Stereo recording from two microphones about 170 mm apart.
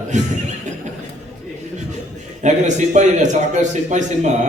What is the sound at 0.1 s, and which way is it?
Speech, 45° right (ahead or behind).